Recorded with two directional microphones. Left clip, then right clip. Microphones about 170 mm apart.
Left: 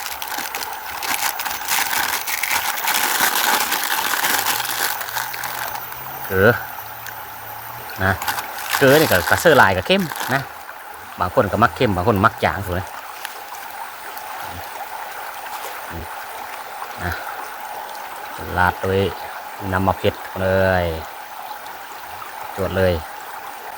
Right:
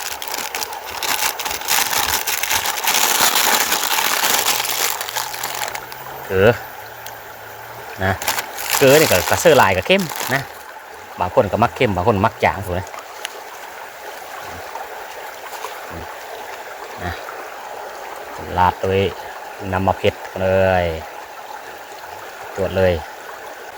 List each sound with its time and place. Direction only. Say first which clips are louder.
0.6 s a sound: right 2 dB; 35° right (ahead or behind)
6.3 s speech: right 1 dB; 10° right (ahead or behind)
8.3 s a sound: right 1 dB; 45° right (ahead or behind)
8.8 s speech: right 2 dB; 10° right (ahead or behind)
11.2 s speech: right 1 dB; centre (ahead or behind)
18.5 s speech: right 2 dB; 5° right (ahead or behind)
22.6 s speech: right 2 dB; 5° right (ahead or behind)